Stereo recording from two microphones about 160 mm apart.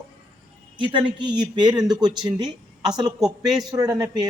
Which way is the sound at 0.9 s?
30° right (ahead or behind).